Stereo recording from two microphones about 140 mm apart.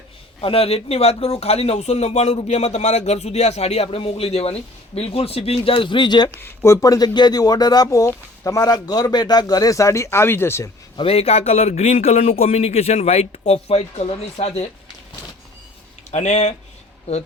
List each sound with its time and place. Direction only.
0.4 s speech: 45° left (ahead or behind)
6.4 s speech: 20° left (ahead or behind)
10.9 s speech: 45° left (ahead or behind)
16.1 s speech: 55° left (ahead or behind)